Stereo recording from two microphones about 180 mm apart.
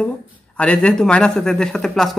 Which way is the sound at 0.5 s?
5° left (ahead or behind).